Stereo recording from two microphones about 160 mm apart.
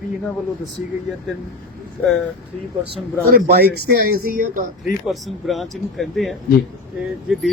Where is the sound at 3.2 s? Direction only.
70° right (ahead or behind).